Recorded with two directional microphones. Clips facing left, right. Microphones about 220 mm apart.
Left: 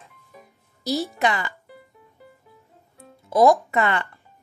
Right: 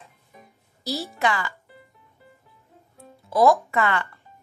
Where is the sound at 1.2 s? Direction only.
20° left (ahead or behind).